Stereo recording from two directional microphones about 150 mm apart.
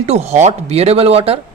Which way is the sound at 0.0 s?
45° right (ahead or behind).